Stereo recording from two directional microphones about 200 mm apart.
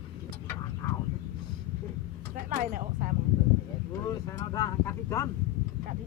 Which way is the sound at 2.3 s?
40° right (ahead or behind).